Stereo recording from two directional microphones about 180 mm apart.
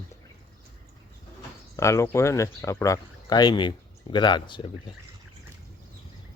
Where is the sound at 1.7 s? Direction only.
15° left (ahead or behind).